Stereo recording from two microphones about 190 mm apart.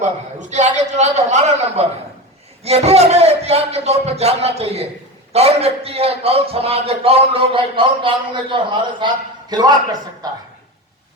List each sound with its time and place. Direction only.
0.0 s a man's voice: 40° right (ahead or behind); by 10.4 s 20° right (ahead or behind)